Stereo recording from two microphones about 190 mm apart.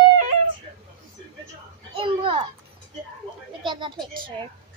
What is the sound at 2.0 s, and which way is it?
Children playing, 30° right (ahead or behind).